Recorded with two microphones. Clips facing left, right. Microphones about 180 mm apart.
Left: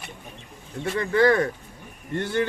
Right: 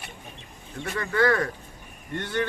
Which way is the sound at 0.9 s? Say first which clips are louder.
Left 4 dB; 20° left (ahead or behind).